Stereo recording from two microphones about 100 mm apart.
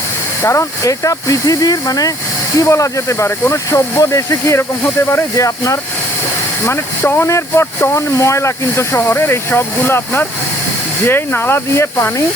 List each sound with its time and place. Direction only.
0.4 s speech: 30° left (ahead or behind)